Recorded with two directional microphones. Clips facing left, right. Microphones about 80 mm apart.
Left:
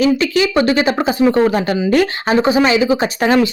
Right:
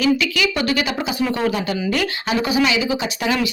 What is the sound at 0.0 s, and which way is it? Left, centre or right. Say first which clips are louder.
Speech: left 5 dB; left.